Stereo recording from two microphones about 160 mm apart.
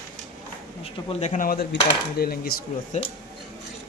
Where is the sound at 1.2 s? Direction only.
55° left (ahead or behind); by 2.5 s 70° left (ahead or behind).